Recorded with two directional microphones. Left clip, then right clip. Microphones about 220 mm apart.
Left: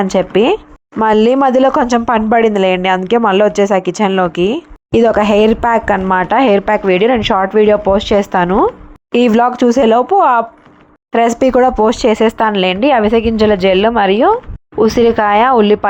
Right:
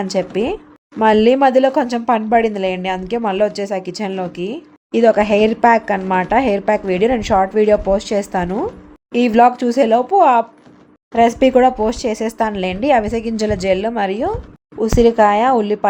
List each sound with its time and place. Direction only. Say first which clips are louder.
0.2 s speech: left 8 dB; 15° left (ahead or behind)